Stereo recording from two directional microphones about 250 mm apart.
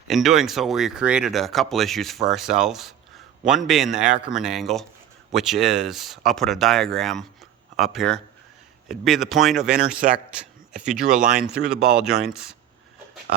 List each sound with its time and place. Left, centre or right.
0.1 s speech: centre